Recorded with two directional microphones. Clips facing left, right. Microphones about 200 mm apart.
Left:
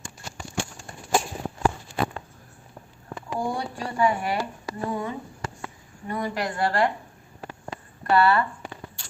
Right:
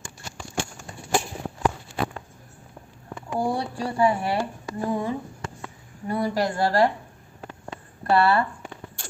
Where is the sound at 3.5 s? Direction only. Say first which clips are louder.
Right 3 dB; 30° right (ahead or behind).